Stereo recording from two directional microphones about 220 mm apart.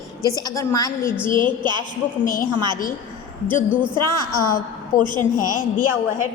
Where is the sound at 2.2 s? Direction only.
40° left (ahead or behind).